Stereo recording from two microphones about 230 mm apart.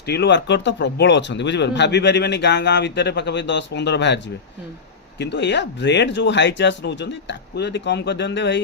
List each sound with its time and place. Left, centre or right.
0.0 s speech: left